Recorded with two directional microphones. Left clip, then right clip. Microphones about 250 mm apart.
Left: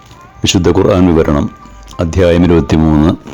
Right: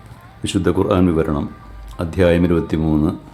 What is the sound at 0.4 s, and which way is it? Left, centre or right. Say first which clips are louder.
Speech: left 8 dB; left.